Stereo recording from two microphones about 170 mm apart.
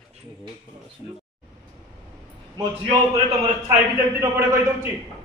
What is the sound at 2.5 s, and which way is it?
A man's voice, 20° right (ahead or behind).